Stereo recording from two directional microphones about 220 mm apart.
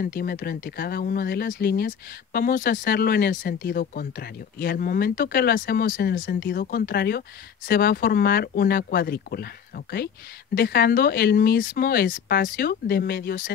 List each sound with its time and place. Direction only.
0.0 s speech: 45° left (ahead or behind)